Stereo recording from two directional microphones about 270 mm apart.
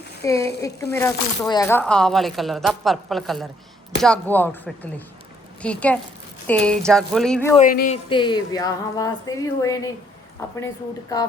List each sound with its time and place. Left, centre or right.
0.2 s a woman's voice: centre
7.5 s speech: left
8.1 s a woman's voice: centre